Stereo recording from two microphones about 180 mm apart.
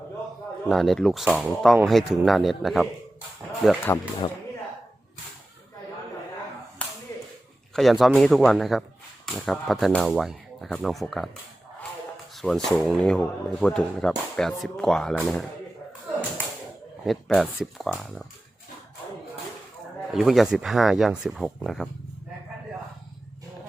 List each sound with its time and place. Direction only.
0.7 s speech: centre (ahead or behind)
7.1 s whip: 15° left (ahead or behind)
7.7 s speech: centre (ahead or behind)
12.4 s speech: 5° left (ahead or behind)
17.1 s speech: centre (ahead or behind)
20.1 s speech: centre (ahead or behind)